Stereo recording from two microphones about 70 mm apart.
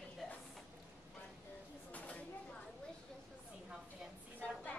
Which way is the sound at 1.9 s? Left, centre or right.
Left.